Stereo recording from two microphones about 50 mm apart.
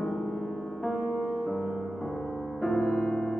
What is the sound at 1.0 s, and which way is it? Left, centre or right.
Music, left.